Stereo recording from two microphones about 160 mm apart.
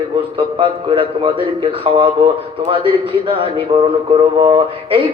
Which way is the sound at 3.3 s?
35° right (ahead or behind).